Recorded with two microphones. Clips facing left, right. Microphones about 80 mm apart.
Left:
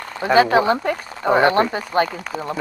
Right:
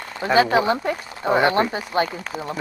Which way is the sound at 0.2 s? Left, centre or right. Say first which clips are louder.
Left 3 dB; left.